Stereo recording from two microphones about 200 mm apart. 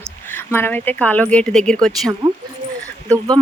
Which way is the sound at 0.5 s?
10° left (ahead or behind).